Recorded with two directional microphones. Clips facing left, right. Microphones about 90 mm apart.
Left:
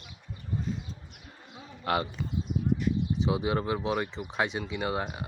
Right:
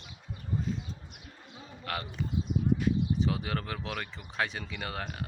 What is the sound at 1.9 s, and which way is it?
Speech, 20° left (ahead or behind).